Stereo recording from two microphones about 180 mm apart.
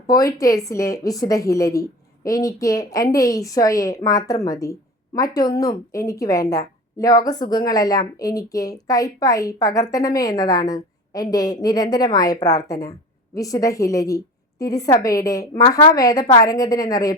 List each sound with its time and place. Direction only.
0.1 s speech: 20° left (ahead or behind)